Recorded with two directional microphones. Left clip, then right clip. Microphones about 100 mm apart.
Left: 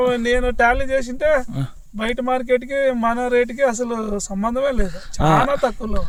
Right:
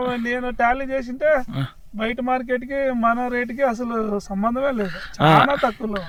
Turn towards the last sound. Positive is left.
turn(degrees=15)  # may be behind; listen again after turning